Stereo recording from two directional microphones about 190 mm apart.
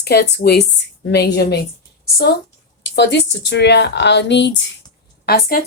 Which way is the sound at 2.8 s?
65° left (ahead or behind).